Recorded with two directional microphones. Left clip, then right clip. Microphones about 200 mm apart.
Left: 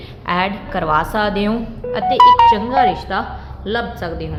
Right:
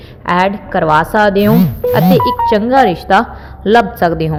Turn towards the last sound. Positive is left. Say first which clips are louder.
# right 11 dB
turn(degrees=-40)  # may be behind; listen again after turning